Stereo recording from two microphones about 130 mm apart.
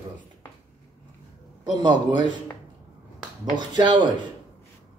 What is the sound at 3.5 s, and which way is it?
Speech, 35° right (ahead or behind).